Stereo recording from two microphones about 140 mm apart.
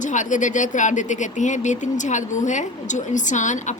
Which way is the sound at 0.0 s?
60° left (ahead or behind).